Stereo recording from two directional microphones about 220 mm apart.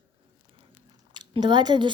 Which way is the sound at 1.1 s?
20° right (ahead or behind).